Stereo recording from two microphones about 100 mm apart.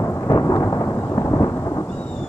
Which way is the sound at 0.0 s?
25° left (ahead or behind).